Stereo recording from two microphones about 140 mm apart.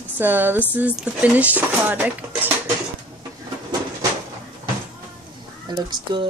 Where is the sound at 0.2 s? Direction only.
15° right (ahead or behind).